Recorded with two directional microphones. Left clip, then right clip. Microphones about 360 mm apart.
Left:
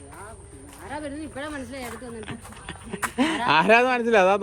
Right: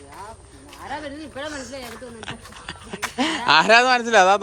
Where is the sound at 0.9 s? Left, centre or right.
Centre.